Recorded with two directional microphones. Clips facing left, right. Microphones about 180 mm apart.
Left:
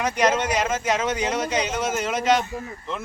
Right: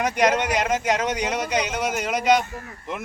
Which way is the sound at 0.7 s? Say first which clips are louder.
Right 1 dB; 15° right (ahead or behind).